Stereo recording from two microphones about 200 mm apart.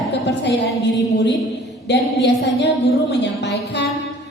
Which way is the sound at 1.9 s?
60° left (ahead or behind).